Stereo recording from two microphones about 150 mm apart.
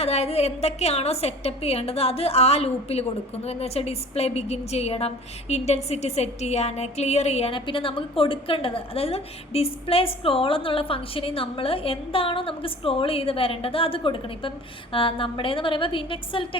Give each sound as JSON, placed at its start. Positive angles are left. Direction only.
{"t": 0.0, "sound": "a woman's voice", "side_deg": 45}